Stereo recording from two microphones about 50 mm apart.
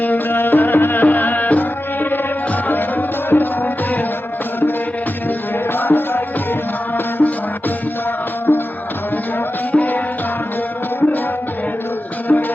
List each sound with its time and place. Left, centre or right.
0.0 s music: left
5.7 s music: left
8.5 s music: left
9.7 s music: left
12.3 s music: left